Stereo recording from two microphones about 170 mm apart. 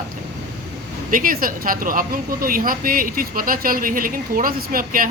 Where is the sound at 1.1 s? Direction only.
55° right (ahead or behind).